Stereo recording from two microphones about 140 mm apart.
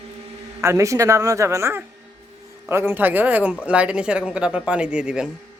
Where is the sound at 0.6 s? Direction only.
20° right (ahead or behind); by 5.3 s 5° right (ahead or behind).